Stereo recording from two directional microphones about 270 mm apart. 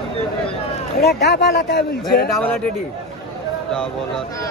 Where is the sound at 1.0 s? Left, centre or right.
Left.